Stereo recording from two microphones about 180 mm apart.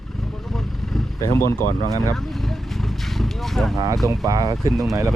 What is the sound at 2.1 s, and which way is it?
Vehicle, centre (ahead or behind).